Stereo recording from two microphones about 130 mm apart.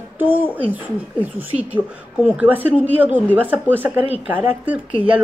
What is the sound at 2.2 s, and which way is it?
A woman's voice, 10° right (ahead or behind).